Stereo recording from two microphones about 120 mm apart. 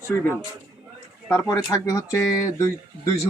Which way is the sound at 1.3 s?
25° left (ahead or behind).